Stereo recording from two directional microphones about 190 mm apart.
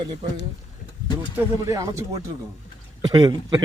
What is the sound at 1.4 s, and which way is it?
A man's voice, 15° right (ahead or behind).